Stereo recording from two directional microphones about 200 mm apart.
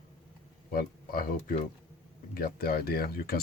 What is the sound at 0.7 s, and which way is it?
Speech, 45° left (ahead or behind).